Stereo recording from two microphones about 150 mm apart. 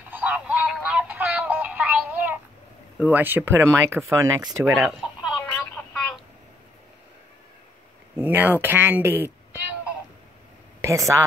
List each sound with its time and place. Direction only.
0.1 s music: 10° right (ahead or behind)
3.0 s speech: 10° right (ahead or behind)
4.7 s a sound: centre (ahead or behind)
5.5 s telephone: 10° left (ahead or behind)
8.2 s speech: 10° right (ahead or behind)
10.8 s speech: 20° right (ahead or behind)